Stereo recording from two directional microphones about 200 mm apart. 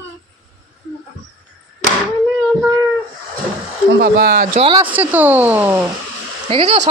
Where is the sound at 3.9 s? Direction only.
45° right (ahead or behind).